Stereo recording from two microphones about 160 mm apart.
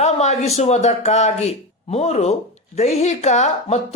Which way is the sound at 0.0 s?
45° left (ahead or behind).